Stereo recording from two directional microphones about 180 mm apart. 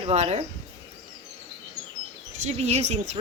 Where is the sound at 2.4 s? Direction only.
35° right (ahead or behind).